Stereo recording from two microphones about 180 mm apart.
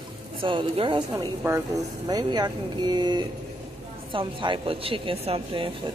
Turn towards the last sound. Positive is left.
turn(degrees=-30)  # may be behind; listen again after turning